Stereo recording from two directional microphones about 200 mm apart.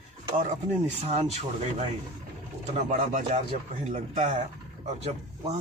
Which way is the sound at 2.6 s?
35° right (ahead or behind).